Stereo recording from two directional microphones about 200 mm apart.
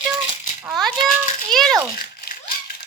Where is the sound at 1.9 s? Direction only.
45° left (ahead or behind).